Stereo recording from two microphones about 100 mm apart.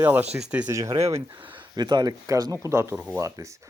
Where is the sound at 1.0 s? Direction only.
85° right.